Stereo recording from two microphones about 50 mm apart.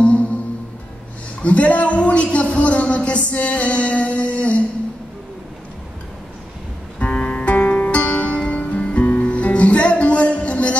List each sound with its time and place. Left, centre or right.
0.0 s music: left
1.4 s a man's voice: left
7.0 s music: left